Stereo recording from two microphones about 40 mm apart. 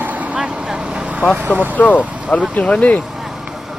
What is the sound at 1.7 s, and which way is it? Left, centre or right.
A man's voice, left.